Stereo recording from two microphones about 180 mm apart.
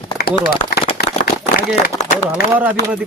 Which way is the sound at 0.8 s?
35° left (ahead or behind).